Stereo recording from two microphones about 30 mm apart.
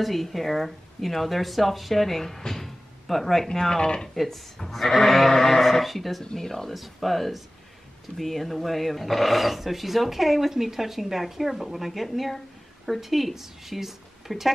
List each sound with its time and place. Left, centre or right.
0.0 s speech: centre
3.7 s speech: left
4.1 s speech: centre
6.7 s a woman's voice: centre